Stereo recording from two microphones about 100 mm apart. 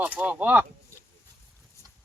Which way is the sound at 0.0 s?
15° right (ahead or behind).